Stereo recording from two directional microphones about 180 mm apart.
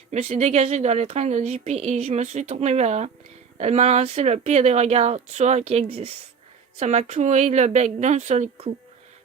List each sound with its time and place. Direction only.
0.1 s speech: 35° right (ahead or behind)